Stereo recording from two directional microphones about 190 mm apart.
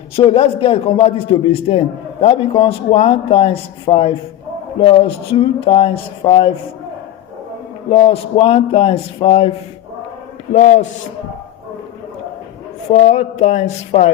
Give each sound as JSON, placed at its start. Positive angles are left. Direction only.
{"t": 0.2, "sound": "a man's voice", "side_deg": 30}
{"t": 7.9, "sound": "a man's voice", "side_deg": 30}
{"t": 12.9, "sound": "a man's voice", "side_deg": 35}